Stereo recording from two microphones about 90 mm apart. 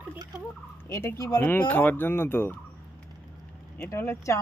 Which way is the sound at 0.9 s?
35° left (ahead or behind).